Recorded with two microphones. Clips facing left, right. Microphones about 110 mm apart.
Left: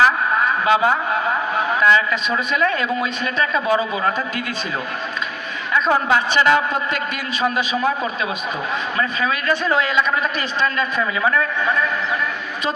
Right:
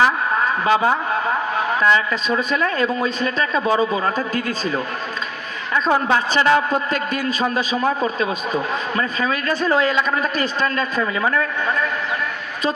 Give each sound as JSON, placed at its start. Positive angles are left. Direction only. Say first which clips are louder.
{"t": 0.0, "sound": "a sound", "louder": "left 1 dB", "side_deg": -30}
{"t": 1.8, "sound": "speech", "louder": "left 2 dB", "side_deg": -30}
{"t": 5.7, "sound": "speech", "louder": "even", "side_deg": -35}